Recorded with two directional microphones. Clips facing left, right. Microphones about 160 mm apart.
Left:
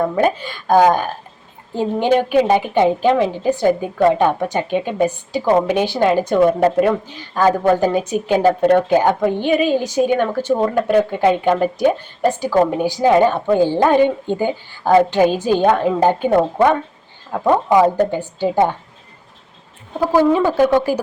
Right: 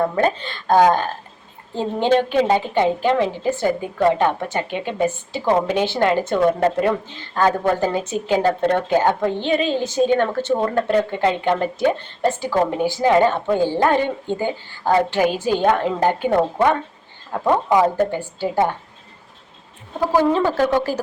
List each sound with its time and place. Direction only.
0.2 s a woman's voice: 10° left (ahead or behind)
17.9 s a woman's voice: 15° left (ahead or behind)
20.3 s a woman's voice: 15° left (ahead or behind)